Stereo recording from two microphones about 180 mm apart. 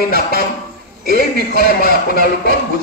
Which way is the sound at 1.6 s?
55° left (ahead or behind).